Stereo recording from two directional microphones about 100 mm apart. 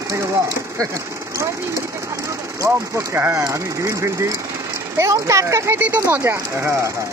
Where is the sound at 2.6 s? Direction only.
25° right (ahead or behind).